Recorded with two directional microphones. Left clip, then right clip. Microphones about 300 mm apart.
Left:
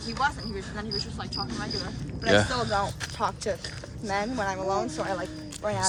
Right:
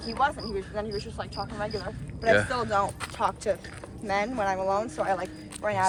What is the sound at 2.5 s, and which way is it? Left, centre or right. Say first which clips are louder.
Speech: right 1 dB; right.